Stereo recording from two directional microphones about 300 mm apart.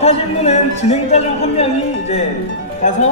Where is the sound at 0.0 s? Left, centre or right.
Left.